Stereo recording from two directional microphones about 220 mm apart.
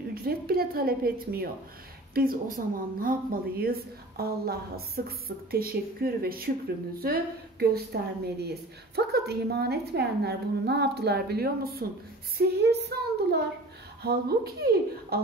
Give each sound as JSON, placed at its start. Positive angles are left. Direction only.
{"t": 0.1, "sound": "a woman's voice", "side_deg": -45}